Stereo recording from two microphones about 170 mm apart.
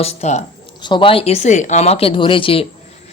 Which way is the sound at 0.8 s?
30° left (ahead or behind).